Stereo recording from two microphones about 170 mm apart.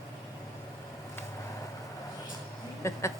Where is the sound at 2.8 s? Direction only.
15° left (ahead or behind).